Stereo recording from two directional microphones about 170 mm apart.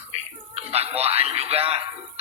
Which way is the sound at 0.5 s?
35° right (ahead or behind).